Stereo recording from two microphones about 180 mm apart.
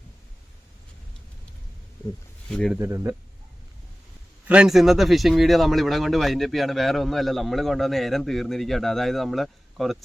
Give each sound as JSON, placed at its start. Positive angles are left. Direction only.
{"t": 2.5, "sound": "speech", "side_deg": 5}
{"t": 2.7, "sound": "speech", "side_deg": -15}
{"t": 4.4, "sound": "speech", "side_deg": -5}